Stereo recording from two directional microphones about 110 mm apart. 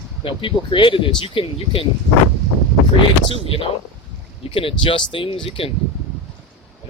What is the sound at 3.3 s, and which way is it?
Speech, 55° left (ahead or behind).